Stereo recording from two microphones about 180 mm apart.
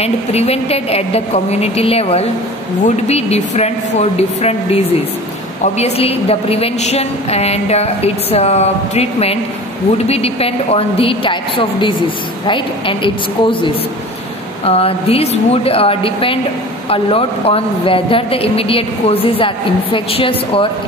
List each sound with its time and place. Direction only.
0.0 s a woman's voice: 35° left (ahead or behind)